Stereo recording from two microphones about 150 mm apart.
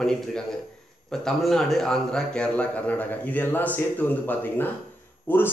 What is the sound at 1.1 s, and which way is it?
A man's voice, 5° left (ahead or behind).